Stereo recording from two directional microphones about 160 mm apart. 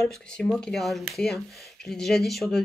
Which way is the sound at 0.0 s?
5° left (ahead or behind).